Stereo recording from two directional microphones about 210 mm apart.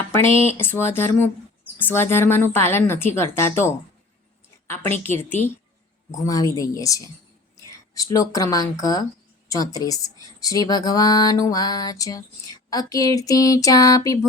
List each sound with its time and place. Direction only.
0.3 s speech: 25° right (ahead or behind)
0.5 s speech: 10° left (ahead or behind)
4.7 s speech: 10° left (ahead or behind)